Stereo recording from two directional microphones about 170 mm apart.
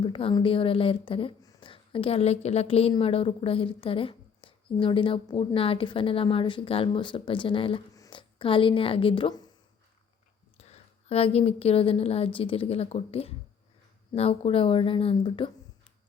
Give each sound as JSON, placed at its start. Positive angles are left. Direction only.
{"t": 0.0, "sound": "a woman's voice", "side_deg": 30}
{"t": 10.6, "sound": "a woman's voice", "side_deg": 35}